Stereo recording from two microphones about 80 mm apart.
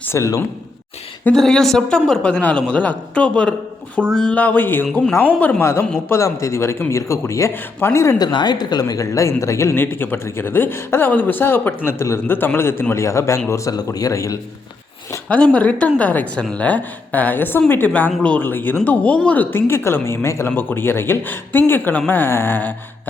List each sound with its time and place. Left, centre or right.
0.0 s a sound: left
1.3 s a man's voice: centre
4.4 s speech: left
6.1 s speech: left
8.2 s speech: left
9.7 s speech: left
13.7 s speech: left
15.3 s a man's voice: centre